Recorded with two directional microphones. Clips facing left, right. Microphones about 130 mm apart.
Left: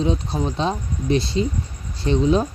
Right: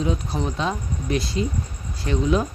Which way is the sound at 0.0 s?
25° left (ahead or behind).